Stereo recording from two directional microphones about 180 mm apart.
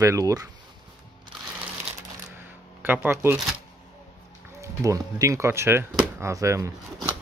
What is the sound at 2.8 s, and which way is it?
Speech, 10° right (ahead or behind).